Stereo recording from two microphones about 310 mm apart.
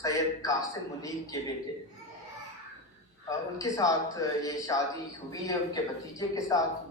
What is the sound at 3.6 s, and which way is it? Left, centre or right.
A man's voice, centre.